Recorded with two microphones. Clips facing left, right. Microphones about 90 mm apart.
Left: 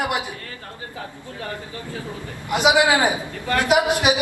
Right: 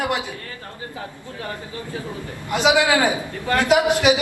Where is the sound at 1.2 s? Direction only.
20° right (ahead or behind).